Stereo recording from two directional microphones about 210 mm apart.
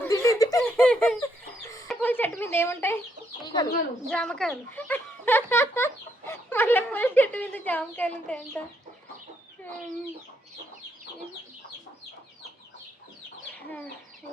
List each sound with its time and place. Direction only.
0.0 s giggle: 15° left (ahead or behind)
0.6 s giggle: 5° left (ahead or behind)
1.9 s chicken: 10° left (ahead or behind)
3.4 s speech: 20° left (ahead or behind)
4.1 s speech: 5° left (ahead or behind)
13.5 s chicken: 10° left (ahead or behind)